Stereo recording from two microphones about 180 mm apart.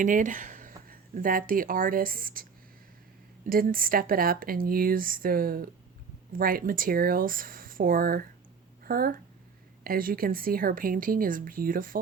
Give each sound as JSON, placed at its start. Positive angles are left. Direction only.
{"t": 0.0, "sound": "speech", "side_deg": -45}